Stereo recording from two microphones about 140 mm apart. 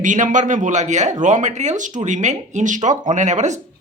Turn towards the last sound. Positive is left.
turn(degrees=-60)  # may be behind; listen again after turning